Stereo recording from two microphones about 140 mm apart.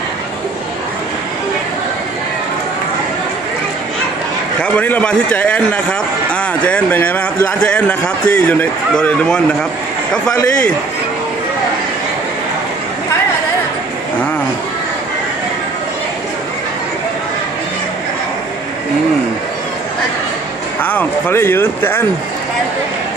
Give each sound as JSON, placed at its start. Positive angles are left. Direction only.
{"t": 4.6, "sound": "a man's voice", "side_deg": 10}
{"t": 20.8, "sound": "a man's voice", "side_deg": 15}